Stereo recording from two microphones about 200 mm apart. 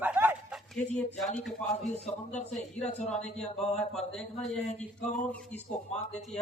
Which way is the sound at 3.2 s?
35° left (ahead or behind).